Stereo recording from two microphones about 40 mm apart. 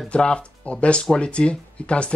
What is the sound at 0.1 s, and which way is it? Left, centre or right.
Speech, left.